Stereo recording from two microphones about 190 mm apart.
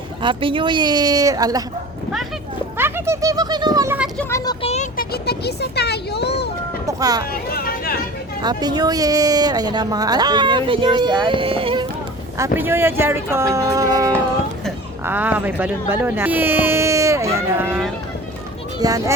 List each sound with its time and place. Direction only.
0.2 s speech: 25° right (ahead or behind)
2.7 s speech: 10° right (ahead or behind)
4.2 s speech: 15° left (ahead or behind)
4.6 s vehicle: 35° left (ahead or behind)
4.9 s speech: 55° left (ahead or behind)
6.8 s a sound: 20° right (ahead or behind)
7.3 s a sound: 50° left (ahead or behind)
8.4 s speech: 20° right (ahead or behind)
12.5 s speech: 10° right (ahead or behind)
18.8 s speech: 20° right (ahead or behind)